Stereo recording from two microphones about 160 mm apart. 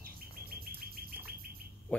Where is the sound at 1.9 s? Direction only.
10° left (ahead or behind).